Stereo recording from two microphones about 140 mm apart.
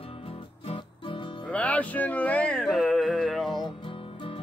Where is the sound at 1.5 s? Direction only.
10° left (ahead or behind).